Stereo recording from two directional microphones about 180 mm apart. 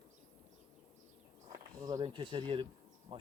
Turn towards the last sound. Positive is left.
turn(degrees=-30)  # may be behind; listen again after turning